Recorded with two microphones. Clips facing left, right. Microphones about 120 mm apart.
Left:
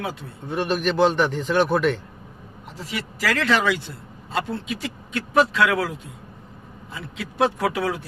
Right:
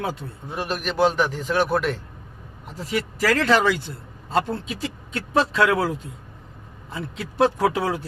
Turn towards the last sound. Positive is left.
turn(degrees=-35)  # may be behind; listen again after turning